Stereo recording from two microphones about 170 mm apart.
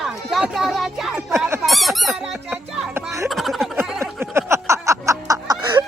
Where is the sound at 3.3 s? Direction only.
Centre (ahead or behind).